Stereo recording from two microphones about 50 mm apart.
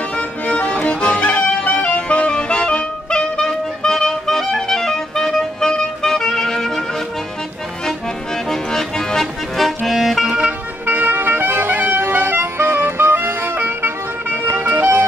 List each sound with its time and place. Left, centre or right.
0.1 s music: left
8.5 s music: centre
10.9 s music: right
13.6 s vehicle: right
14.6 s music: right